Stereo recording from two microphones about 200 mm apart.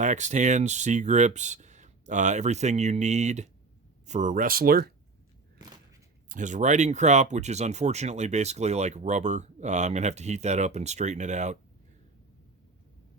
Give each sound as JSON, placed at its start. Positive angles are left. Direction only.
{"t": 0.0, "sound": "speech", "side_deg": -35}
{"t": 6.2, "sound": "speech", "side_deg": -40}